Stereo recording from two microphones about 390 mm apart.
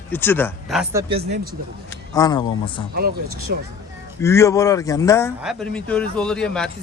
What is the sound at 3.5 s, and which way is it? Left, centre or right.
Speech, right.